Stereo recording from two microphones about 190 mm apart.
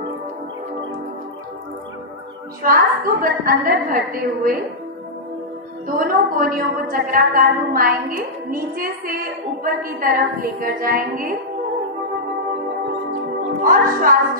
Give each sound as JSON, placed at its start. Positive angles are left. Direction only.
{"t": 2.6, "sound": "a woman's voice", "side_deg": -50}
{"t": 5.9, "sound": "a woman's voice", "side_deg": -50}
{"t": 13.7, "sound": "a woman's voice", "side_deg": -45}